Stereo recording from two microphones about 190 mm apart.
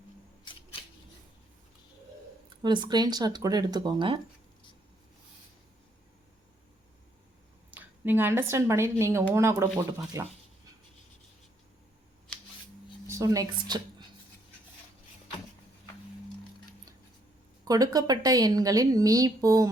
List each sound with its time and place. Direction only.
0.5 s scissors: 25° left (ahead or behind)
2.6 s a woman's voice: 25° right (ahead or behind)
7.7 s a woman's voice: 10° right (ahead or behind)
13.1 s speech: 15° right (ahead or behind)
17.7 s a woman's voice: 20° right (ahead or behind)